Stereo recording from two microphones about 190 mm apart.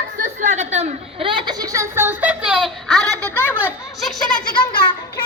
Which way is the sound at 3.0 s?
15° right (ahead or behind).